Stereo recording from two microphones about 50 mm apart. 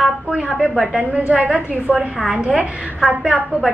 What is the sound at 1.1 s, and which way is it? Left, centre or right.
A woman's voice, right.